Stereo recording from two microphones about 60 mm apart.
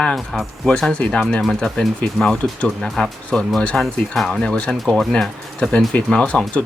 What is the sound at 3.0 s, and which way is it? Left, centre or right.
Speech, centre.